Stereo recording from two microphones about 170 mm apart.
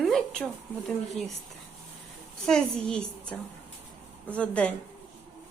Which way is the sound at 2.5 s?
5° left (ahead or behind).